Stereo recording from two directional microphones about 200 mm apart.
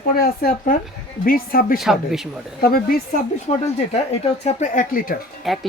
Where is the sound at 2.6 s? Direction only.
50° left (ahead or behind).